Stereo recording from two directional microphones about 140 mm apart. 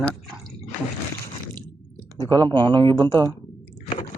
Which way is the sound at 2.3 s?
35° right (ahead or behind).